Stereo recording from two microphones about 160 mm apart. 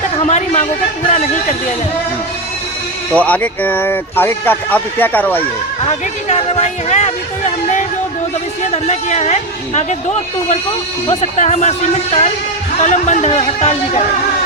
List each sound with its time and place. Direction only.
0.2 s a sound: 45° left (ahead or behind)
3.2 s speech: 10° left (ahead or behind)
5.4 s speech: 40° left (ahead or behind)
8.6 s speech: 45° left (ahead or behind)
11.1 s speech: 45° left (ahead or behind)